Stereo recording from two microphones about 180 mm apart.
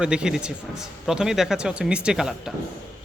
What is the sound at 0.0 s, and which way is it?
Speech, 5° right (ahead or behind).